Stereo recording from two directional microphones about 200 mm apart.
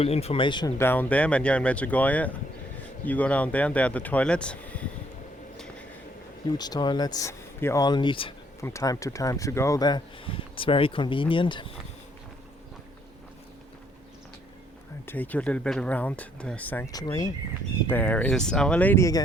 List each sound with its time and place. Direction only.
0.0 s speech: 30° left (ahead or behind)
0.8 s speech: 10° left (ahead or behind)
6.6 s speech: 20° left (ahead or behind)
15.0 s speech: 10° left (ahead or behind)
16.9 s speech: 20° left (ahead or behind)